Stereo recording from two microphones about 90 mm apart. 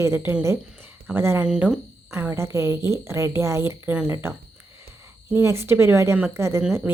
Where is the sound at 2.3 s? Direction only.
30° right (ahead or behind).